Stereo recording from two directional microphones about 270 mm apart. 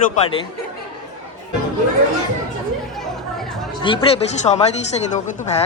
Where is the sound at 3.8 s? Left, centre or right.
Centre.